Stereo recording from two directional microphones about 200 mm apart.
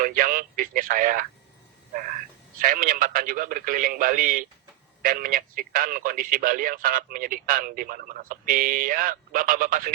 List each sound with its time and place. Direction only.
0.0 s speech: 45° right (ahead or behind)
2.6 s speech: 45° right (ahead or behind)